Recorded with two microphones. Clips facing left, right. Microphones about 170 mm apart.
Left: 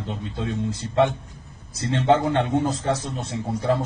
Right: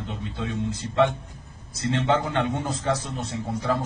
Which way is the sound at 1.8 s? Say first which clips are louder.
Left 4 dB; 35° left (ahead or behind).